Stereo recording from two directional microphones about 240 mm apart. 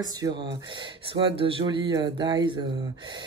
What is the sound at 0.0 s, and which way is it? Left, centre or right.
Speech, centre.